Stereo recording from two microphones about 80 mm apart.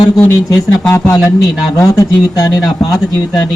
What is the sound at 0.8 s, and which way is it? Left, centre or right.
Speech, left.